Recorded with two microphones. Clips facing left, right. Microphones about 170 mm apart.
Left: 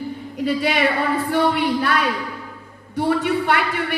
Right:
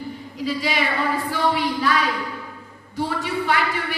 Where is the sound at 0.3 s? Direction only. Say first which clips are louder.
Left 4 dB; 55° left (ahead or behind).